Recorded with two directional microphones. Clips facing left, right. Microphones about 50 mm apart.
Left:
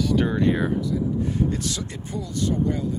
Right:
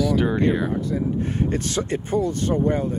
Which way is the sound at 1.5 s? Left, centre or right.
Right.